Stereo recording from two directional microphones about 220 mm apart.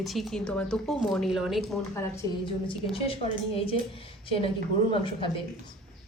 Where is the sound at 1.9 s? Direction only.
15° left (ahead or behind).